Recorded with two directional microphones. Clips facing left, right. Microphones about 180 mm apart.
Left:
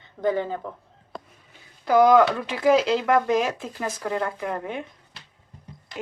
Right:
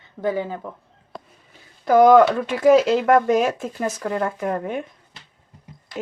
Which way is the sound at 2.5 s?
45° right (ahead or behind).